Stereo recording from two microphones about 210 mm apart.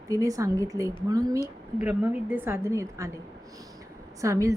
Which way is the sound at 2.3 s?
10° right (ahead or behind).